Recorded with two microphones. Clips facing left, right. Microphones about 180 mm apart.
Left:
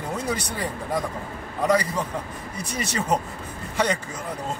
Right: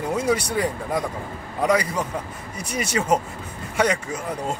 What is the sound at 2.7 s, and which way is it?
Speech, 10° right (ahead or behind).